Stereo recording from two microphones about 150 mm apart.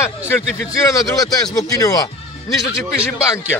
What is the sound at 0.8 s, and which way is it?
A man's voice, 25° left (ahead or behind).